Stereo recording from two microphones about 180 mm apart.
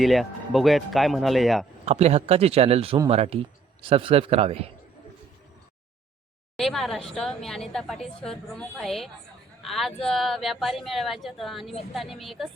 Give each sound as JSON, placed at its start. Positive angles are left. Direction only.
{"t": 0.0, "sound": "a woman's voice", "side_deg": 0}
{"t": 1.8, "sound": "speech", "side_deg": -35}
{"t": 6.6, "sound": "a woman's voice", "side_deg": 0}